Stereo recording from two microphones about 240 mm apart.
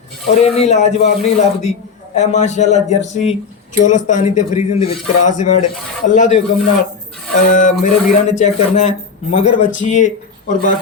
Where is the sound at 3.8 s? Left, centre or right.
Left.